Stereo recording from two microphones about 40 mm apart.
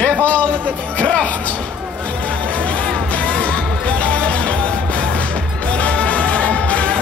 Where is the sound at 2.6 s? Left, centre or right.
Left.